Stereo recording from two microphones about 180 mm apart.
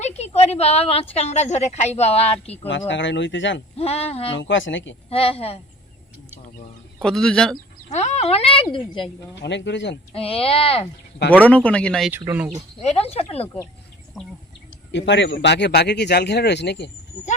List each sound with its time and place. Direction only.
0.0 s a sound: 35° left (ahead or behind)
1.1 s a woman's voice: 40° left (ahead or behind)
2.6 s speech: 90° left
3.8 s a woman's voice: 35° left (ahead or behind)
4.4 s speech: 90° left
5.0 s a woman's voice: 30° left (ahead or behind)
7.0 s speech: 5° left (ahead or behind)
7.9 s a woman's voice: 40° left (ahead or behind)
9.3 s speech: 75° left (ahead or behind)
10.1 s a woman's voice: 30° left (ahead or behind)
11.3 s speech: 10° left (ahead or behind)
12.1 s speech: 10° right (ahead or behind)
13.0 s a woman's voice: 35° left (ahead or behind)
14.9 s speech: 80° left